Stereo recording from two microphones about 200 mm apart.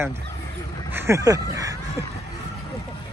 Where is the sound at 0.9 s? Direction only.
15° right (ahead or behind).